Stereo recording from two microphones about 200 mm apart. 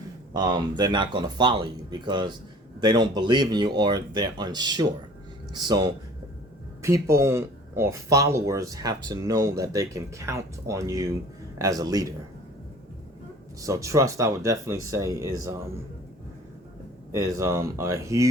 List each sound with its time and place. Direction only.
0.3 s speech: 20° right (ahead or behind)
13.6 s speech: 15° right (ahead or behind)
17.1 s speech: 15° right (ahead or behind)